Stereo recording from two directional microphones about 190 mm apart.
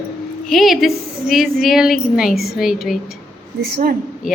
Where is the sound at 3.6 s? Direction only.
50° right (ahead or behind).